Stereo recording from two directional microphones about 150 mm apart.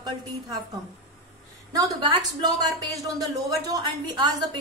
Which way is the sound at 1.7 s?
25° right (ahead or behind).